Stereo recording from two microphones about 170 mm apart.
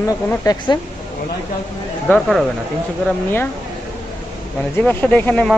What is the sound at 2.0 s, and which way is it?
Speech, centre (ahead or behind).